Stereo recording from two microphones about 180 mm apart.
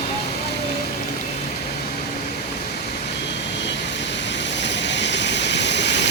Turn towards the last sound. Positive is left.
turn(degrees=75)  # may be behind; listen again after turning